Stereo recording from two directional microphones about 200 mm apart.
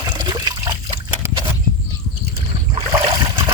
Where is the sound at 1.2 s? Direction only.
15° right (ahead or behind).